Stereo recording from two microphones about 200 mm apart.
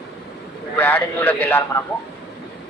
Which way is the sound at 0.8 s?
10° left (ahead or behind).